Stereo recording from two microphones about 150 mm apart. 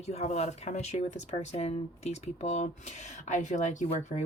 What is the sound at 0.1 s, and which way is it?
Speech, 45° left (ahead or behind).